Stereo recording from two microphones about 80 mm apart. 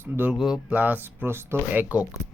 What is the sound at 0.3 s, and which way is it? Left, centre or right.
Speech, centre.